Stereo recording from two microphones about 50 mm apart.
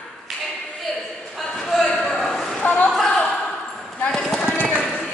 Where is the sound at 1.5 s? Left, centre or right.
Centre.